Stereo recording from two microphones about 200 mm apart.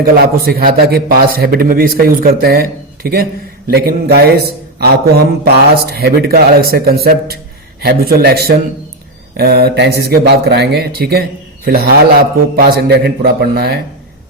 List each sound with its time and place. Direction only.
0.0 s speech: 50° right (ahead or behind)